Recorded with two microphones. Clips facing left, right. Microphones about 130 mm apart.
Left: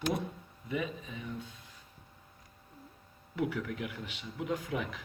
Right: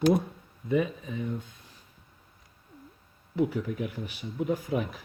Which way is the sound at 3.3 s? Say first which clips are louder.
Right 6 dB; 35° right (ahead or behind).